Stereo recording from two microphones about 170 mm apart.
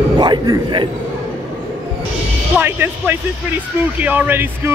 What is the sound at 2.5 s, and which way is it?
Speech, 10° right (ahead or behind).